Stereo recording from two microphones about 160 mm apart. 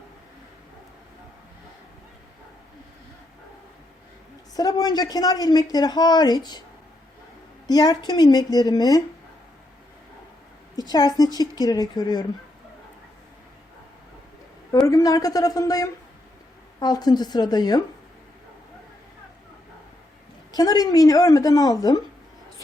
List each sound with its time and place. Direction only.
4.5 s speech: 25° left (ahead or behind)
7.7 s speech: 25° left (ahead or behind)
10.8 s speech: 25° left (ahead or behind)
14.8 s speech: 20° left (ahead or behind)
20.5 s speech: 25° left (ahead or behind)